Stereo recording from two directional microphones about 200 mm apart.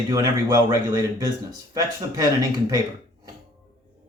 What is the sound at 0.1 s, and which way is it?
Speech, 15° right (ahead or behind).